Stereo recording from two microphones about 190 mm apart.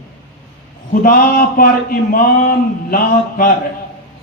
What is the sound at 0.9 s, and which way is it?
A man's voice, 45° left (ahead or behind).